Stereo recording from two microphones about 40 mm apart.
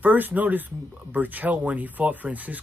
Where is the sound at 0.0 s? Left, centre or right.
Right.